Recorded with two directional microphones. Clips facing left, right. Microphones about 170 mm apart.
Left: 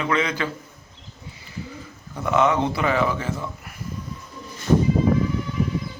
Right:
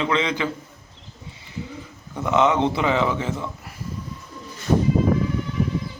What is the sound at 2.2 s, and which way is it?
A man's voice, 20° right (ahead or behind).